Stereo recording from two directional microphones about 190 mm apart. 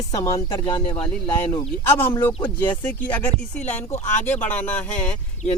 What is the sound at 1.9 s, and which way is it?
Speech, 10° left (ahead or behind).